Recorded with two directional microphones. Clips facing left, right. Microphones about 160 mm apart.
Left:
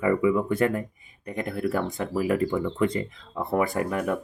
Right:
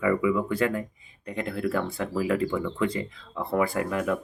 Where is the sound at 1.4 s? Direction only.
15° left (ahead or behind).